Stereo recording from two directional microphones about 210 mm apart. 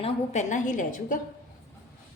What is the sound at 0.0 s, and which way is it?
A woman's voice, 35° left (ahead or behind).